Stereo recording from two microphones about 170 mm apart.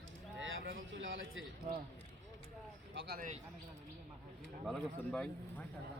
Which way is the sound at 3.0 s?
75° right (ahead or behind).